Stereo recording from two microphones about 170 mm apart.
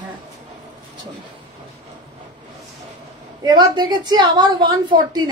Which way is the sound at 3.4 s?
25° right (ahead or behind).